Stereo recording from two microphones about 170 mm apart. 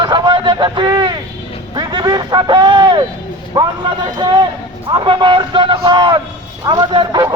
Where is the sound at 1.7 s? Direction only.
25° right (ahead or behind).